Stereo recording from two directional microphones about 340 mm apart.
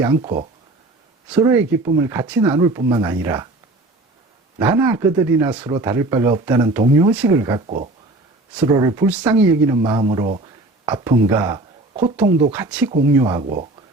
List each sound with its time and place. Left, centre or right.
0.0 s speech: centre
4.5 s speech: centre